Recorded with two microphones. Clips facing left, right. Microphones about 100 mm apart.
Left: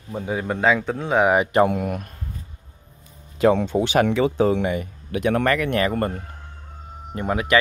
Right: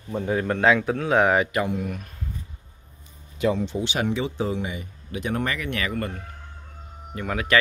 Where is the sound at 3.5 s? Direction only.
50° left (ahead or behind).